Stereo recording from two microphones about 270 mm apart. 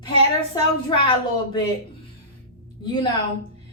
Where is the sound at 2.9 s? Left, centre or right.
Centre.